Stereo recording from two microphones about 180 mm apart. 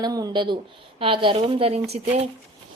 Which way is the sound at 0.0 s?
20° right (ahead or behind).